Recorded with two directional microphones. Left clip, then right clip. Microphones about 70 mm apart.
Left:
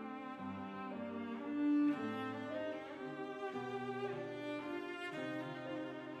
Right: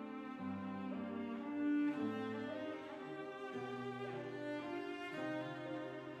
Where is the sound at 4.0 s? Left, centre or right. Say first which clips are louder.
Left 2 dB; left.